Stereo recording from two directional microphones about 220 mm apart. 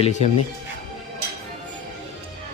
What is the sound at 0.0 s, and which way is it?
Speech, 30° left (ahead or behind).